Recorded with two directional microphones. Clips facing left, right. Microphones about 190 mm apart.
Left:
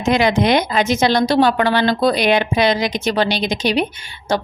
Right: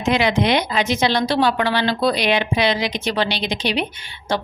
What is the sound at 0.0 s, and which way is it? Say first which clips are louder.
A woman's voice: left 3 dB; 45° left (ahead or behind).